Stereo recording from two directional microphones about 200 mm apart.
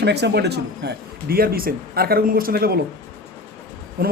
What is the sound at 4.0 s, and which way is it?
Speech, 50° right (ahead or behind).